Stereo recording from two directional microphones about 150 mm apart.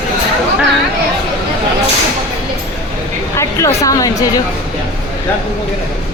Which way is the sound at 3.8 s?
25° left (ahead or behind).